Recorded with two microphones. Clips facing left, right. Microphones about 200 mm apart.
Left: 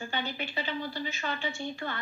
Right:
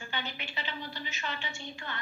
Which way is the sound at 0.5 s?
35° left (ahead or behind).